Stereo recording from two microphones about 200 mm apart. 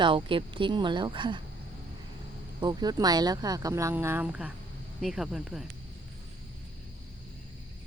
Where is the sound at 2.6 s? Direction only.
20° right (ahead or behind); by 5.6 s centre (ahead or behind).